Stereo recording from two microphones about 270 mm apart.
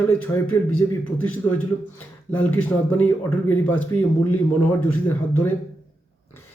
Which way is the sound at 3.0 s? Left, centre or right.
Centre.